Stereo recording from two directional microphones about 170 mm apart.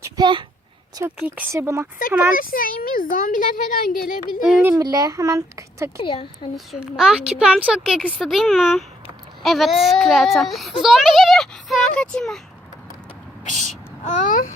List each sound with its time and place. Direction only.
0.0 s a sound: 25° right (ahead or behind)
1.0 s speech: 10° right (ahead or behind)
2.3 s speech: 55° left (ahead or behind)
4.8 s speech: 20° right (ahead or behind)
6.0 s a woman's voice: 30° left (ahead or behind)
6.7 s a woman's voice: 5° right (ahead or behind)
13.4 s a child's voice: 45° left (ahead or behind)